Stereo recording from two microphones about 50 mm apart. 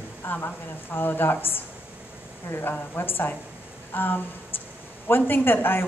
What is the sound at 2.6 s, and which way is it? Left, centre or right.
A woman's voice, left.